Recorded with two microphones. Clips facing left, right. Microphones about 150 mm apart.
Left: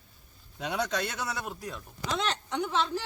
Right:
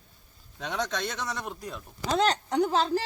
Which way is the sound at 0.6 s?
10° left (ahead or behind).